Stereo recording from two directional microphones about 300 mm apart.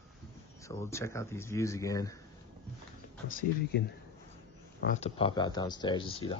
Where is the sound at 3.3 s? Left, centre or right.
Left.